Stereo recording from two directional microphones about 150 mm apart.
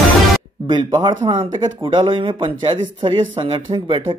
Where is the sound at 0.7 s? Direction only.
30° right (ahead or behind).